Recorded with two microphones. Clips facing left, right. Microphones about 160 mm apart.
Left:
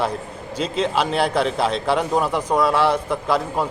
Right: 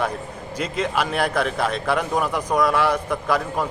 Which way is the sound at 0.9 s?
30° left (ahead or behind).